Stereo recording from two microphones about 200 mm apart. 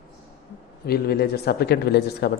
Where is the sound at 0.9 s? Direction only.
50° left (ahead or behind).